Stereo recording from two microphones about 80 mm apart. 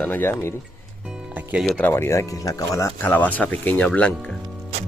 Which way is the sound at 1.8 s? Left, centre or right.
Left.